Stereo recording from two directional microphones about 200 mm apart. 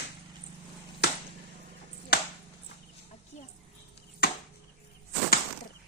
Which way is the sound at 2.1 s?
50° left (ahead or behind).